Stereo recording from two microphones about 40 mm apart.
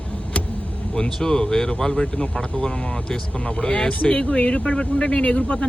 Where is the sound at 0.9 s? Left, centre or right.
Centre.